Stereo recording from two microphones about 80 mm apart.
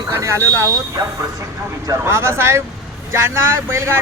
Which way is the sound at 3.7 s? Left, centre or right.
Right.